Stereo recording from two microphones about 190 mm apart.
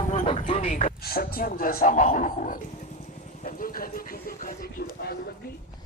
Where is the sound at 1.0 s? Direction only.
55° left (ahead or behind).